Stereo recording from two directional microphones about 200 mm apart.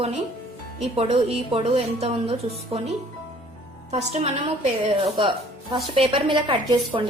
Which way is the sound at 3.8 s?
35° right (ahead or behind).